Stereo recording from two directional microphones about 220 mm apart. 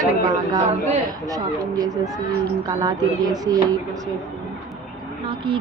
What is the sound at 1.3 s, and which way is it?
Speech, 15° right (ahead or behind).